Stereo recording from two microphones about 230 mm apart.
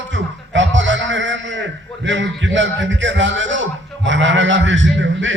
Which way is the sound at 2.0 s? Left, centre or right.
Right.